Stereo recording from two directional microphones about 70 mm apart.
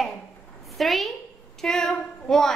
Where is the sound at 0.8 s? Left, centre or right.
Centre.